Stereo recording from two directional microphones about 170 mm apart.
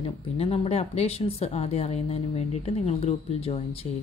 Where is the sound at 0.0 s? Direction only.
35° left (ahead or behind).